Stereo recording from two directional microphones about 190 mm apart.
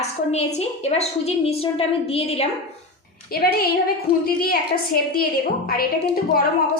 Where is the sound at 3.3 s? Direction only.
50° left (ahead or behind).